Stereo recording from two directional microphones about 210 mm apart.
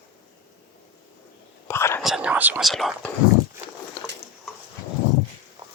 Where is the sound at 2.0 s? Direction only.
5° right (ahead or behind).